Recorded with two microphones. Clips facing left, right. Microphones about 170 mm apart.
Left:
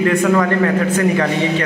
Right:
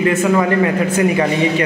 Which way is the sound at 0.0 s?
5° right (ahead or behind).